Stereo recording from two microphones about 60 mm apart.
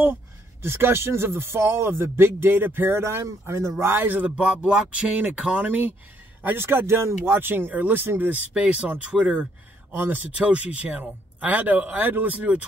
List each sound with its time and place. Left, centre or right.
0.0 s speech: right
4.4 s speech: centre
6.4 s speech: right; by 9.5 s centre
9.9 s speech: right
10.5 s speech: right